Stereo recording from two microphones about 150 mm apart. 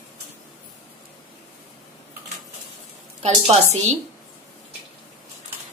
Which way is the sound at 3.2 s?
45° right (ahead or behind).